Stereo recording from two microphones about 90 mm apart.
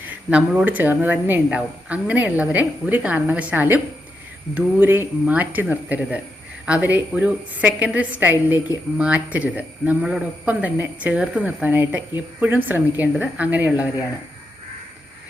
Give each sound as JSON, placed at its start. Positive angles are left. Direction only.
{"t": 0.1, "sound": "speech", "side_deg": -15}